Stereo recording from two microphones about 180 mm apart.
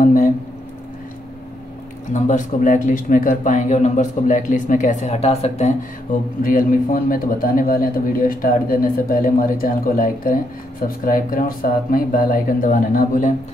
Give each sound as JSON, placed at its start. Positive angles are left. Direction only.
{"t": 0.0, "sound": "a sound", "side_deg": 45}
{"t": 2.1, "sound": "a man's voice", "side_deg": 45}
{"t": 6.4, "sound": "a man's voice", "side_deg": 50}